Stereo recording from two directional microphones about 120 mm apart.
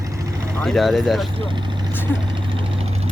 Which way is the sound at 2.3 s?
45° right (ahead or behind).